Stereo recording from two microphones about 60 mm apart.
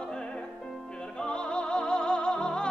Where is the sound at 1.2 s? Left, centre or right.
Centre.